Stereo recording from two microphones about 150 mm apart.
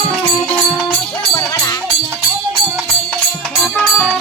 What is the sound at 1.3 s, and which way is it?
Music, 25° left (ahead or behind).